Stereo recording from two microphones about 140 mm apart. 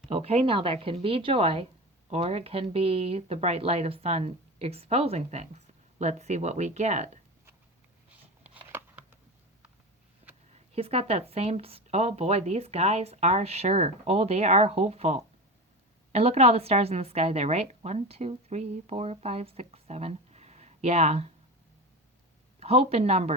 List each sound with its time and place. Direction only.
0.1 s a woman's voice: 45° right (ahead or behind)
8.4 s a sound: 10° right (ahead or behind)
10.5 s a woman's voice: 45° right (ahead or behind)
22.6 s a woman's voice: 45° right (ahead or behind)